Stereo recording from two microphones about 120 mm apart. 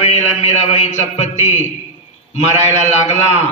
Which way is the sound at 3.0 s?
65° left (ahead or behind).